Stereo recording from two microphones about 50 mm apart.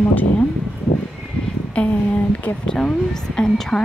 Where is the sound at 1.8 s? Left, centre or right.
Left.